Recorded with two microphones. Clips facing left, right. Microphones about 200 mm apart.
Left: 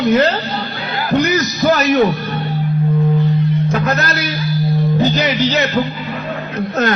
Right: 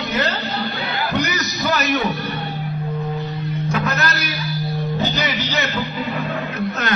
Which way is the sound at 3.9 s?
40° left (ahead or behind).